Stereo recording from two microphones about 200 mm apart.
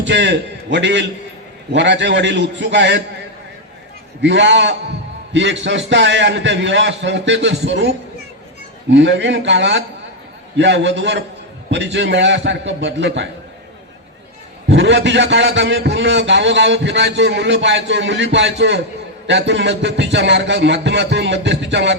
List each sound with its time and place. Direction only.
0.0 s a man's voice: 60° right (ahead or behind)
4.2 s a man's voice: 65° right (ahead or behind)
14.7 s a man's voice: 65° right (ahead or behind)